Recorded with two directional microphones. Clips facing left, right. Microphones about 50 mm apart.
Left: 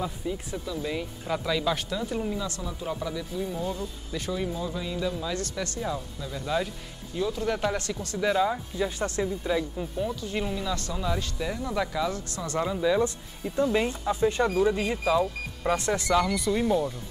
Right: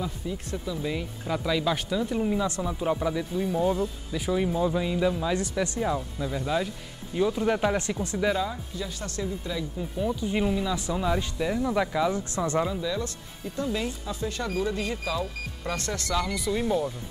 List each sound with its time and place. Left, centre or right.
0.0 s speech: centre
0.7 s speech: centre
2.2 s speech: right
6.4 s speech: centre
7.2 s speech: centre
8.4 s speech: left
10.2 s speech: centre
12.8 s speech: left
16.3 s speech: centre